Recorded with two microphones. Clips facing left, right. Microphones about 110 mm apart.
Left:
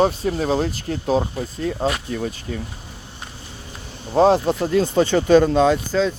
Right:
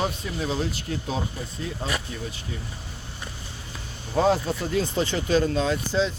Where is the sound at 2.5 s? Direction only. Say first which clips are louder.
Left 7 dB; 50° left (ahead or behind).